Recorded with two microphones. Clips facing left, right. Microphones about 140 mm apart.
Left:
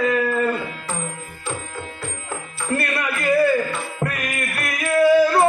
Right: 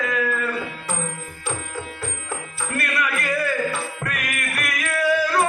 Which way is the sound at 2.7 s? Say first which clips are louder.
Left 2 dB; 30° left (ahead or behind).